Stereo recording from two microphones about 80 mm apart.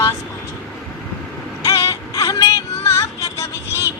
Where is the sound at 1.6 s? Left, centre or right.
Left.